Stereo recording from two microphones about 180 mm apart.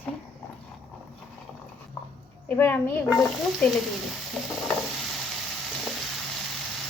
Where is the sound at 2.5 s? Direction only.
15° left (ahead or behind).